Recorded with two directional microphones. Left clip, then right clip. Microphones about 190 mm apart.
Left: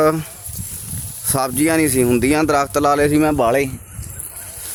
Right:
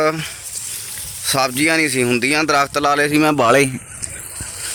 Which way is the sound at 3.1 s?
30° right (ahead or behind).